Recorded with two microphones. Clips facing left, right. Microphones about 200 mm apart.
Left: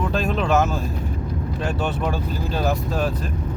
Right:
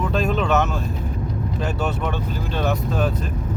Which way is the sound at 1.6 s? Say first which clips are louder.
Left 1 dB; centre (ahead or behind).